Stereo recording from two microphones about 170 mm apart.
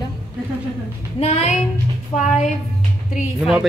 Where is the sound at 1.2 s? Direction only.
40° left (ahead or behind).